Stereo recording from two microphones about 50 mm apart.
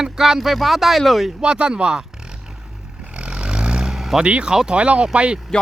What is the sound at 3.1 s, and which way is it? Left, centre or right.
Vehicle, right.